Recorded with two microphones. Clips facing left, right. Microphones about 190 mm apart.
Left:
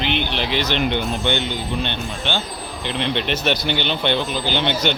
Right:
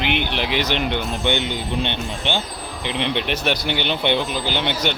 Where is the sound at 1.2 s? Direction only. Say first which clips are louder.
Even; 15° right (ahead or behind).